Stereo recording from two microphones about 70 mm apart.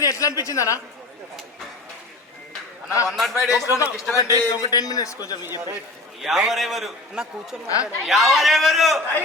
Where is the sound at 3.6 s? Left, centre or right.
Left.